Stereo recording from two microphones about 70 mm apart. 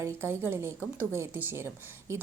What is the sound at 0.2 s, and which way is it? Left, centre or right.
A woman's voice, right.